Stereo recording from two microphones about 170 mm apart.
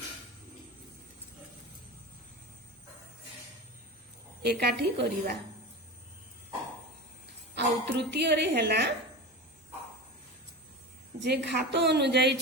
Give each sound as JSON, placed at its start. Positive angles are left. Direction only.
{"t": 4.4, "sound": "a woman's voice", "side_deg": -75}
{"t": 7.5, "sound": "a woman's voice", "side_deg": -80}
{"t": 11.2, "sound": "a woman's voice", "side_deg": -90}